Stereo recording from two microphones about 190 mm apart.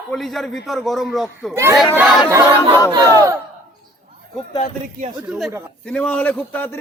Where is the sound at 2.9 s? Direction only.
15° right (ahead or behind).